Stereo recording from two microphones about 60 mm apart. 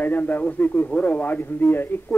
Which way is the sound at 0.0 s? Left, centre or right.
Left.